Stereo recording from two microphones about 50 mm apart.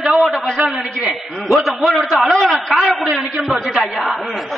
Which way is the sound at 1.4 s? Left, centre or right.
Centre.